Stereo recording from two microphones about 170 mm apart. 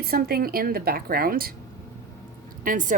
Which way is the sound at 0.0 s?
60° right (ahead or behind).